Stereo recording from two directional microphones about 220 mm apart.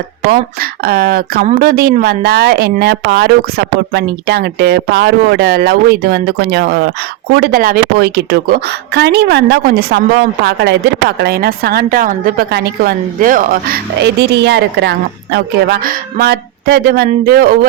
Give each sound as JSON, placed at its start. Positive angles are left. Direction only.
{"t": 0.3, "sound": "a woman's voice", "side_deg": -45}